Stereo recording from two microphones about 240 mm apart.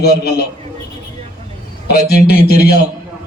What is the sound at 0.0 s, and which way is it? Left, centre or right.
Speech, left.